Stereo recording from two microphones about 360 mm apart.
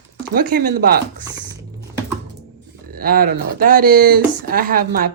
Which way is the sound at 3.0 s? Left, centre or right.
Right.